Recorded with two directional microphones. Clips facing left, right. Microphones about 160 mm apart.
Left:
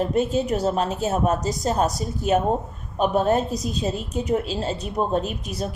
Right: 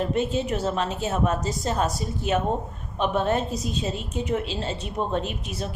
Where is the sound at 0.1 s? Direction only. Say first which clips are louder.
Left 3 dB; 40° left (ahead or behind).